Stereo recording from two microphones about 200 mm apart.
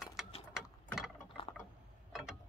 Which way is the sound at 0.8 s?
Centre (ahead or behind).